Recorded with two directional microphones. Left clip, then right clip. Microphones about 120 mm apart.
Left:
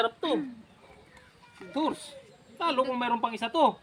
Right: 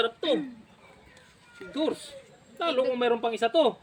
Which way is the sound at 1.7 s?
35° left (ahead or behind).